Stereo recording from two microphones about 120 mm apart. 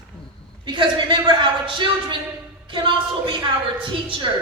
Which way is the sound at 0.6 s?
40° right (ahead or behind).